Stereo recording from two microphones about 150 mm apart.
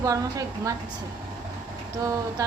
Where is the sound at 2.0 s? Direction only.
20° right (ahead or behind).